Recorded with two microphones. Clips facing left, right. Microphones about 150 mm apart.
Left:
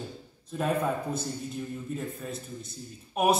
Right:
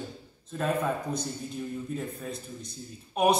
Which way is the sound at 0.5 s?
10° left (ahead or behind).